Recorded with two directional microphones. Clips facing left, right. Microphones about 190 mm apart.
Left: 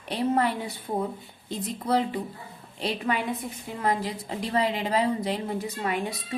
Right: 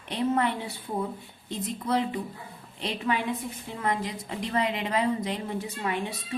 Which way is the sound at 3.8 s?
35° left (ahead or behind).